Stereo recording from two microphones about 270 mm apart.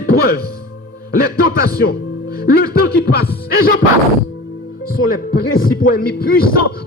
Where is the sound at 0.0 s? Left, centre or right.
Left.